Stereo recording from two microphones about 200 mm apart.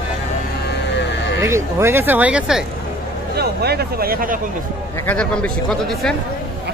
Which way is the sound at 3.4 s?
55° right (ahead or behind).